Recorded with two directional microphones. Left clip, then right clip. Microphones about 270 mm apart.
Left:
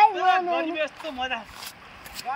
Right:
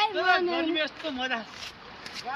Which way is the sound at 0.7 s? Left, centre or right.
Centre.